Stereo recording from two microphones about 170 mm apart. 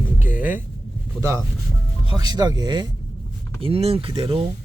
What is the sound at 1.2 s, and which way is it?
Speech, 15° right (ahead or behind).